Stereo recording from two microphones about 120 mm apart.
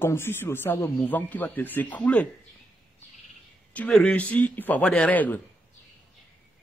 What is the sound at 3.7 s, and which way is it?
A man's voice, 10° left (ahead or behind).